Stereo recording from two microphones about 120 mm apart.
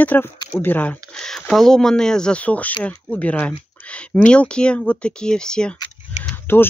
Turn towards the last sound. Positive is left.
turn(degrees=20)  # may be behind; listen again after turning